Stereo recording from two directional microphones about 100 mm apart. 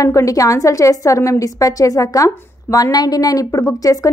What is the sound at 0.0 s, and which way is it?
A woman's voice, 35° left (ahead or behind).